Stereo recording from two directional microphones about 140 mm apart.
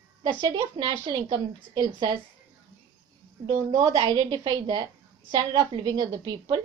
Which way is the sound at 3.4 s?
25° right (ahead or behind).